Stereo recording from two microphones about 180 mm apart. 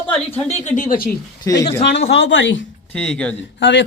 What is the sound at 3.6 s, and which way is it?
Speech, 85° left.